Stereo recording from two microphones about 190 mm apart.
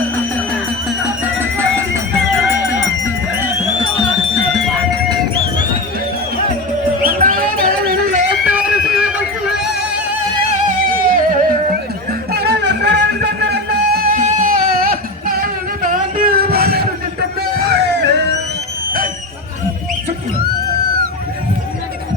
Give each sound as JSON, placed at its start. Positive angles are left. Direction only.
{"t": 0.3, "sound": "music", "side_deg": 5}
{"t": 1.2, "sound": "music", "side_deg": -10}
{"t": 4.9, "sound": "music", "side_deg": -20}
{"t": 7.0, "sound": "music", "side_deg": -45}
{"t": 8.4, "sound": "music", "side_deg": -5}
{"t": 11.1, "sound": "music", "side_deg": -50}
{"t": 12.3, "sound": "music", "side_deg": -60}